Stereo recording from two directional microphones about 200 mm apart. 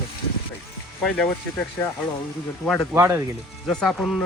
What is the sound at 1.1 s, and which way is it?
Speech, 5° left (ahead or behind).